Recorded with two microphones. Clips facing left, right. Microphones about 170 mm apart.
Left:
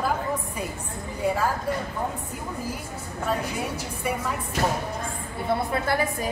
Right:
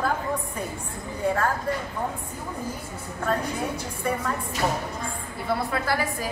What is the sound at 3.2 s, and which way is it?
Speech, 10° left (ahead or behind).